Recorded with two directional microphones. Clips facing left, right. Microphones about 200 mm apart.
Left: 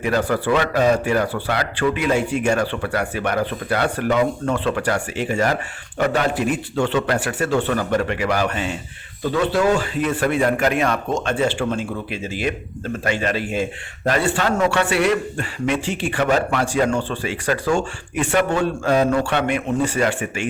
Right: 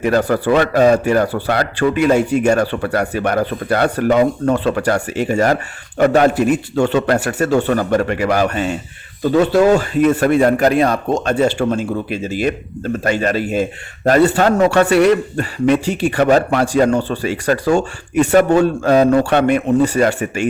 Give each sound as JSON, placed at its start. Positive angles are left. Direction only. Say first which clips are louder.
{"t": 0.0, "sound": "a man's voice", "louder": "right 5 dB", "side_deg": -40}